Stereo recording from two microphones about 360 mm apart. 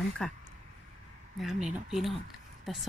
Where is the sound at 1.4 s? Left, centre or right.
Centre.